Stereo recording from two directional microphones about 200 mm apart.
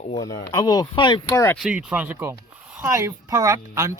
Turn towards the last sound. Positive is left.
turn(degrees=-15)  # may be behind; listen again after turning